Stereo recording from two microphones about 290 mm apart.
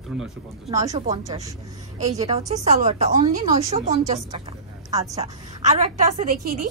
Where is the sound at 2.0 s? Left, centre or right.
Right.